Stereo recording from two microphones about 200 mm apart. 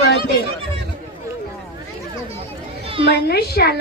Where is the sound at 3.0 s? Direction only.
55° left (ahead or behind).